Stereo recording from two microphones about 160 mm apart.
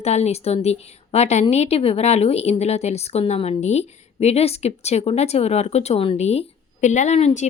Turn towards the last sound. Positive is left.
turn(degrees=45)  # may be behind; listen again after turning